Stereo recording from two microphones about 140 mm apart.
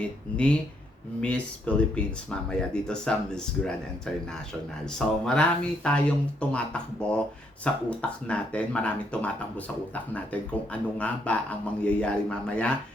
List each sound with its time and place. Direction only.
0.3 s speech: 10° left (ahead or behind)
10.7 s speech: 10° left (ahead or behind)